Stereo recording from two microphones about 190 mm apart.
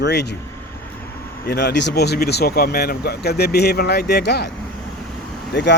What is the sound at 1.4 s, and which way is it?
Speech, 60° left (ahead or behind).